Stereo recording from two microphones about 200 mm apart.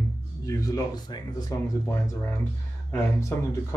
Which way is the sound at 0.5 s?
15° left (ahead or behind).